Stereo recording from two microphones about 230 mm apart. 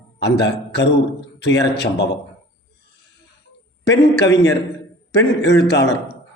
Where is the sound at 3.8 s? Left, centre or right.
Left.